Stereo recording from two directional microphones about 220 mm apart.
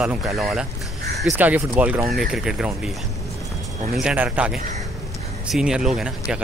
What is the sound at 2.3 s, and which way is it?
Speech, centre (ahead or behind).